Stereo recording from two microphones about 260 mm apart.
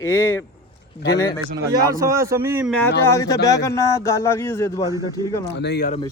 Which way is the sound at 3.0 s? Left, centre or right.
Centre.